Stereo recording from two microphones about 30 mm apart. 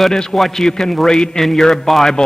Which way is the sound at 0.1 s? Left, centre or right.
Left.